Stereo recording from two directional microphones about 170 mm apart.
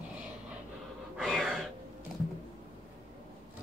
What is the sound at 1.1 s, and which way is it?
Gasp, centre (ahead or behind).